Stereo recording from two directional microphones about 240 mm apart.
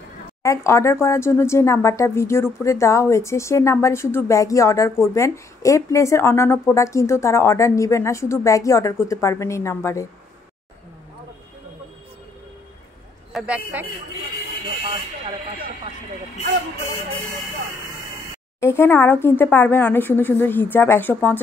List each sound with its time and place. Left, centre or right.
0.4 s speech: centre
13.3 s a man's voice: centre
18.6 s speech: centre